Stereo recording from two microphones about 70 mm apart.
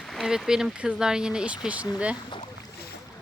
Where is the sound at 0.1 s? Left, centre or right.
Centre.